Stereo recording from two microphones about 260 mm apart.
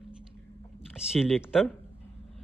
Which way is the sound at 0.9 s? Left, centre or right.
Centre.